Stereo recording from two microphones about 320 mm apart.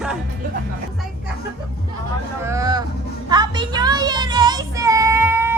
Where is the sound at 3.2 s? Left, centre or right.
Centre.